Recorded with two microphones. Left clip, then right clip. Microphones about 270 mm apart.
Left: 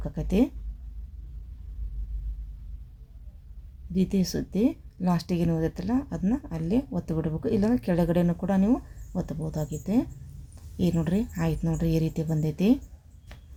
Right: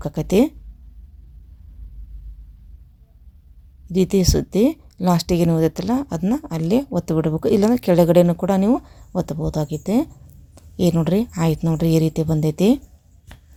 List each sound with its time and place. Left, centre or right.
0.0 s speech: right
3.9 s speech: right
13.3 s a sound: centre